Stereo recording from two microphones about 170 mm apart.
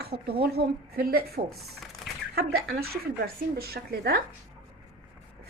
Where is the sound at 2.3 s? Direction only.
65° right (ahead or behind).